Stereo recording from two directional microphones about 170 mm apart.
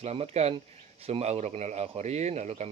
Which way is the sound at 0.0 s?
40° right (ahead or behind).